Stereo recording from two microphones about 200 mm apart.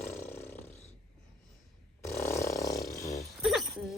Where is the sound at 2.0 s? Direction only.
15° left (ahead or behind).